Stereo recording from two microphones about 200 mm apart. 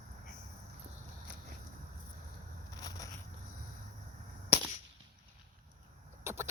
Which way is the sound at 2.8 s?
15° left (ahead or behind).